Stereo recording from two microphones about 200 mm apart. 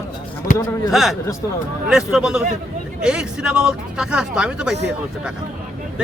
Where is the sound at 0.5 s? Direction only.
40° left (ahead or behind).